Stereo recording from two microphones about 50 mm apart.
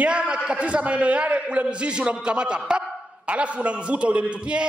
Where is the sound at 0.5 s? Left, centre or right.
Right.